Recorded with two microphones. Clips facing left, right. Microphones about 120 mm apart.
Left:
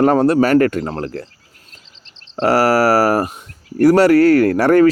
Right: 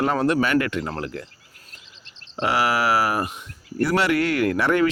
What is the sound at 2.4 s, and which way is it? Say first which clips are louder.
Speech: left 8 dB; 40° left (ahead or behind).